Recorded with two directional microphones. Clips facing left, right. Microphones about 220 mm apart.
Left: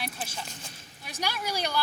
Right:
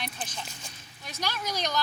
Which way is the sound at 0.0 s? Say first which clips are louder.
Left 1 dB; 5° left (ahead or behind).